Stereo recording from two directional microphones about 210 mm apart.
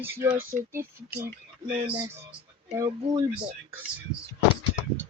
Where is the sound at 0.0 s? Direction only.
10° right (ahead or behind).